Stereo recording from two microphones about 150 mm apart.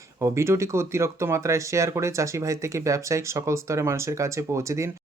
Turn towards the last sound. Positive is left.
turn(degrees=-20)  # may be behind; listen again after turning